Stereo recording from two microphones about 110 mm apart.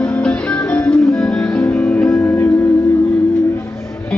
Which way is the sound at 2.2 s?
20° left (ahead or behind).